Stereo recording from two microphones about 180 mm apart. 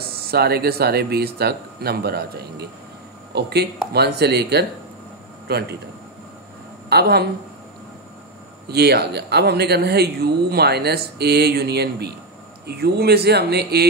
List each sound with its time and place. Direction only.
0.0 s a man's voice: 60° right (ahead or behind)
6.9 s speech: 65° right (ahead or behind)
8.6 s speech: 65° right (ahead or behind)